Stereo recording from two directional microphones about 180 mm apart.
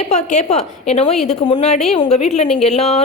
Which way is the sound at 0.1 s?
40° left (ahead or behind).